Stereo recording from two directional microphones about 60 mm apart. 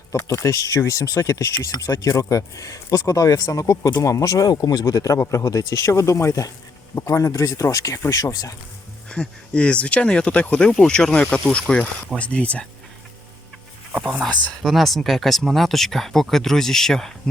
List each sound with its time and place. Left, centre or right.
0.1 s speech: left
1.6 s speech: left
8.1 s speech: left
9.0 s speech: centre
14.0 s speech: centre